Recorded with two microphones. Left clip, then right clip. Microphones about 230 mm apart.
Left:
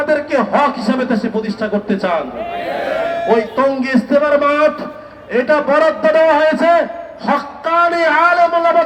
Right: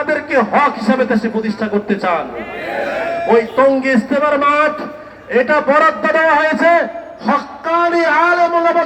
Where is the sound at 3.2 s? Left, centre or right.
Left.